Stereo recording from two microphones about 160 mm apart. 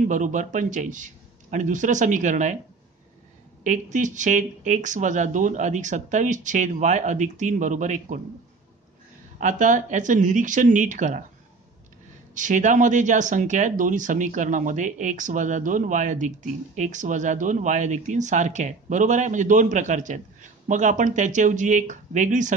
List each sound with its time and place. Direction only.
0.1 s speech: 50° right (ahead or behind)
3.6 s speech: 50° right (ahead or behind)
9.4 s speech: 55° right (ahead or behind)
12.4 s speech: 55° right (ahead or behind)